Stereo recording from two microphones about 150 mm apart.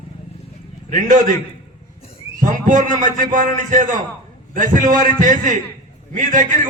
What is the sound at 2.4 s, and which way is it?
A man's voice, 60° right (ahead or behind).